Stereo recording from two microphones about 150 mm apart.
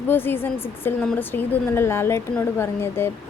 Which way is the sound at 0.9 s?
15° left (ahead or behind).